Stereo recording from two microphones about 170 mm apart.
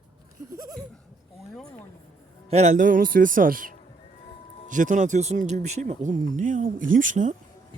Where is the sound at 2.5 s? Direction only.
40° right (ahead or behind).